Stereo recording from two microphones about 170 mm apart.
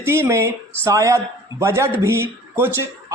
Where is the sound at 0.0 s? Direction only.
15° right (ahead or behind).